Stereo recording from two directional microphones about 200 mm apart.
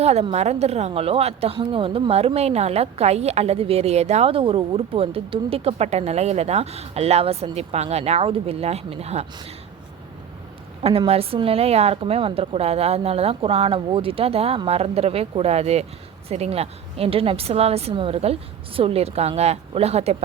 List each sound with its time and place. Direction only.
0.0 s a woman's voice: 30° right (ahead or behind)
10.8 s a woman's voice: 30° right (ahead or behind)